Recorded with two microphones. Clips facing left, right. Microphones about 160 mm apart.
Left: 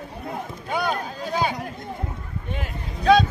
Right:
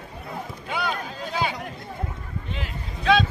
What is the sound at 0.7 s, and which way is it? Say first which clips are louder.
Run: left 4 dB; 45° left (ahead or behind).